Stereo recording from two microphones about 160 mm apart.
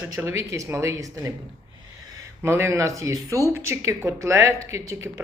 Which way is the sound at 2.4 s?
15° right (ahead or behind).